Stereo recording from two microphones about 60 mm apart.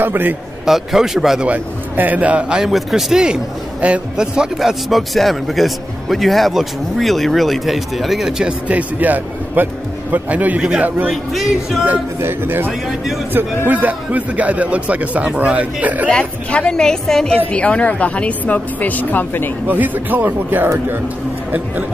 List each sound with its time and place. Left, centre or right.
0.0 s speech: right
0.7 s speech: centre
1.4 s a man's voice: right
2.5 s a man's voice: centre
4.6 s speech: centre
8.6 s a man's voice: right
11.1 s speech: centre
12.2 s speech: right
12.8 s speech: centre
13.3 s a man's voice: right
16.1 s a woman's voice: centre
17.5 s speech: centre
19.7 s a man's voice: right